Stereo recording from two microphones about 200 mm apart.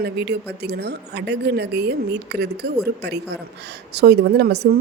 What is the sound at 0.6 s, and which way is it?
A woman's voice, 55° right (ahead or behind).